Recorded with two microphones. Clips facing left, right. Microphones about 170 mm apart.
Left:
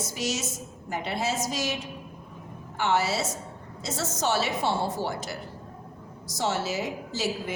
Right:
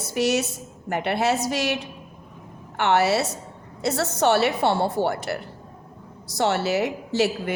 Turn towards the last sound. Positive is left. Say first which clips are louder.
# right 7 dB
turn(degrees=-65)  # may be behind; listen again after turning